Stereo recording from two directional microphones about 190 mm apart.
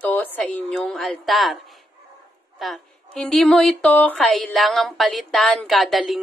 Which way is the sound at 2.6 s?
Centre (ahead or behind).